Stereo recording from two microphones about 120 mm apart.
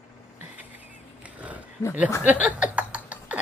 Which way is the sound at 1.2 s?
10° right (ahead or behind).